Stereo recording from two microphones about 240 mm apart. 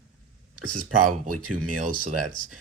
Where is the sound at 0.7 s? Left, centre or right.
Right.